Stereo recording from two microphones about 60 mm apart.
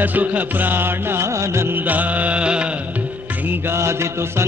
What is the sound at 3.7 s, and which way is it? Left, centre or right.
Mantra, right.